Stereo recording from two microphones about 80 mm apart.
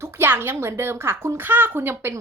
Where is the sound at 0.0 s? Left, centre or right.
Right.